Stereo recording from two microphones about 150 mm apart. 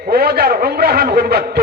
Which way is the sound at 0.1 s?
90° right.